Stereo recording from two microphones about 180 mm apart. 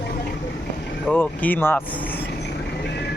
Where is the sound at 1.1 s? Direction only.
10° left (ahead or behind).